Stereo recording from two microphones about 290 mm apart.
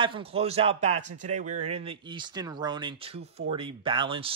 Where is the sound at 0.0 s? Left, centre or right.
Centre.